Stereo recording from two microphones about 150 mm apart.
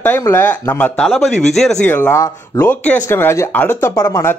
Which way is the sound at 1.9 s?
15° left (ahead or behind).